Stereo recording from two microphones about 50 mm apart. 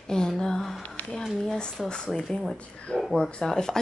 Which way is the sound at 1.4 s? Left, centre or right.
Centre.